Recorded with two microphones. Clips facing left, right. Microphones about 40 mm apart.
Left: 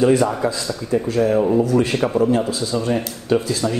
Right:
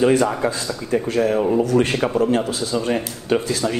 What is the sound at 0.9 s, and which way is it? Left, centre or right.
Speech, right.